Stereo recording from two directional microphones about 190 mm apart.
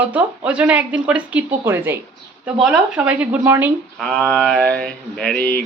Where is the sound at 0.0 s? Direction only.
5° right (ahead or behind).